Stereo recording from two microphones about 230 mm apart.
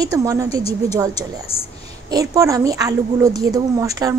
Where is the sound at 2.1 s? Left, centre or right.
Centre.